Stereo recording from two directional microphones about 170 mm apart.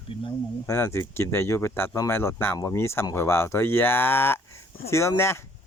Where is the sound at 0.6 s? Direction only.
15° left (ahead or behind).